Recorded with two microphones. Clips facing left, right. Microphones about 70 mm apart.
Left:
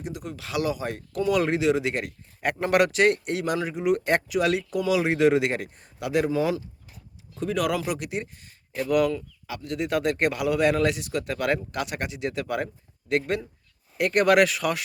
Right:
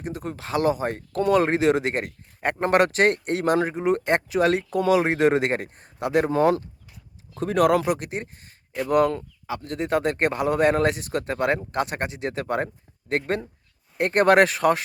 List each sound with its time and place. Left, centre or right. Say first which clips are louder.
0.0 s speech: right 3 dB; right